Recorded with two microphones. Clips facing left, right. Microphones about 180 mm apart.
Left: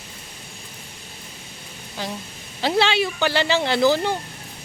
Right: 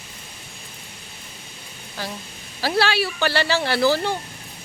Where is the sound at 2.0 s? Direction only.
20° left (ahead or behind).